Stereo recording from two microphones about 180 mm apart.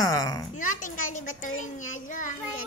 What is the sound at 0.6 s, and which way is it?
A child's voice, 45° left (ahead or behind).